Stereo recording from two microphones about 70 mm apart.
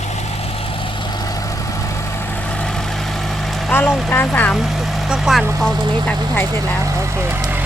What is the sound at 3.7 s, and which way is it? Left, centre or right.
Speech, left.